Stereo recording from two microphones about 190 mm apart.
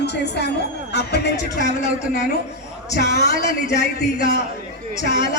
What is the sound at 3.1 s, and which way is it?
Speech, 60° left (ahead or behind).